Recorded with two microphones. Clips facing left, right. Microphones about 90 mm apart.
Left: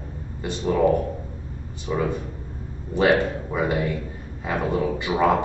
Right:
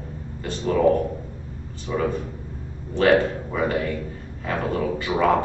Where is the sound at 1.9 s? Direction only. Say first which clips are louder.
Even; 15° left (ahead or behind).